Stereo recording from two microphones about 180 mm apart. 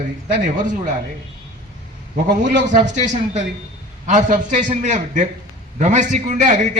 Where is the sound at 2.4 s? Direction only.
45° right (ahead or behind).